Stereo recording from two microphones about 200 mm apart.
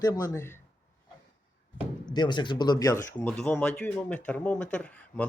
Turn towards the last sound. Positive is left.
turn(degrees=5)  # may be behind; listen again after turning